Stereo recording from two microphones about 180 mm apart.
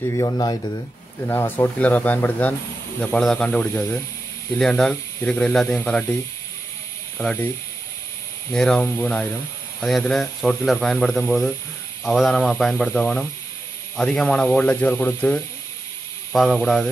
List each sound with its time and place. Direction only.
0.0 s speech: 20° left (ahead or behind)
8.5 s speech: 5° left (ahead or behind)
16.6 s speech: centre (ahead or behind)